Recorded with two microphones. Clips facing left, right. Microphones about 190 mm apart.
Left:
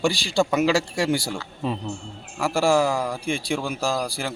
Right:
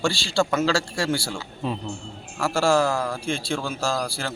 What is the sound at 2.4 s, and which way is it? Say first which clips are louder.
A man's voice: left 1 dB; 15° left (ahead or behind).